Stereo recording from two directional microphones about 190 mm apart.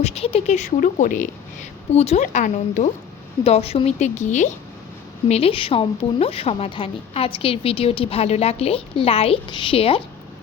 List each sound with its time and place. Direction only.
0.0 s a woman's voice: 35° left (ahead or behind)